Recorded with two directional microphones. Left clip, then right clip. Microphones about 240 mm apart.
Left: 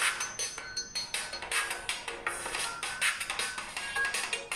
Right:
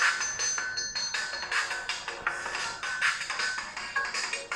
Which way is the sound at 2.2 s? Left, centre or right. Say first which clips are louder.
Right 3 dB; left.